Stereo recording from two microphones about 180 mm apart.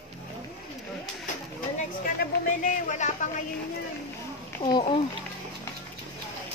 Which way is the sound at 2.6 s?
45° left (ahead or behind).